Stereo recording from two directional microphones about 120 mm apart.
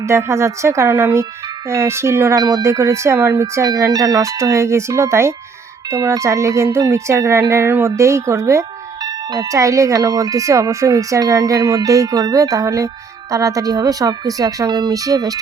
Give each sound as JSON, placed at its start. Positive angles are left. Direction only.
{"t": 0.0, "sound": "speech", "side_deg": -25}